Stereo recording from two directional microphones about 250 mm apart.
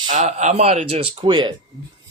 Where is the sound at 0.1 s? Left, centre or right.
Right.